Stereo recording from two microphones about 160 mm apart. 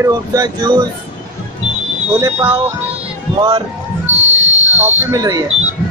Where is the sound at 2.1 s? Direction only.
20° right (ahead or behind).